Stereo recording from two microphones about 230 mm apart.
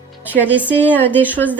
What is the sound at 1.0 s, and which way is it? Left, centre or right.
Speech, centre.